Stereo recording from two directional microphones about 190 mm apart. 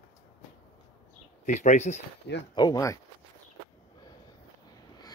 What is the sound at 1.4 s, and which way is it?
Speech, 40° left (ahead or behind).